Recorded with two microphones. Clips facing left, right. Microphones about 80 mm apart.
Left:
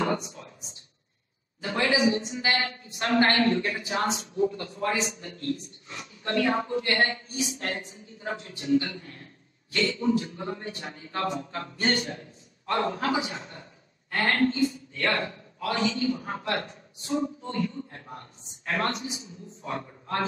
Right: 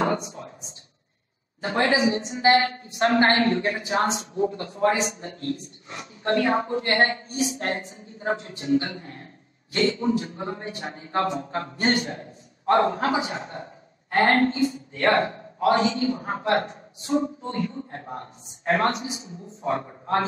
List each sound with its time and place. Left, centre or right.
0.0 s speech: right
1.6 s speech: right